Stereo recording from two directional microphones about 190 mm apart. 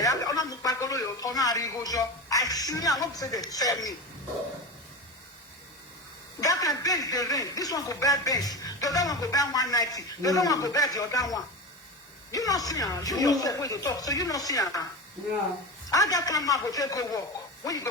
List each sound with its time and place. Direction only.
0.0 s speech: 20° left (ahead or behind)
6.4 s speech: 20° left (ahead or behind)
15.9 s speech: 20° left (ahead or behind)